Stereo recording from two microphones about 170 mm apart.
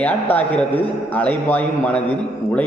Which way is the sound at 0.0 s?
10° left (ahead or behind).